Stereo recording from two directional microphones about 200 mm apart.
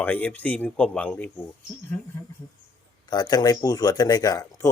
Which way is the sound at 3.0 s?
20° left (ahead or behind).